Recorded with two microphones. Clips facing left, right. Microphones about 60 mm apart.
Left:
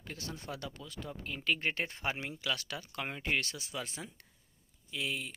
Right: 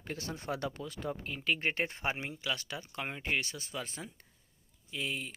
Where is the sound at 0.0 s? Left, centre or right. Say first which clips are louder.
Right 4 dB; centre.